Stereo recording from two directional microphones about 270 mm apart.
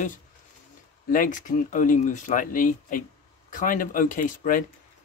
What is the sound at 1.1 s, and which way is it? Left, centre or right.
Speech, left.